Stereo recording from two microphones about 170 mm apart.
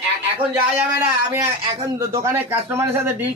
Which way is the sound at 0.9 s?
15° right (ahead or behind).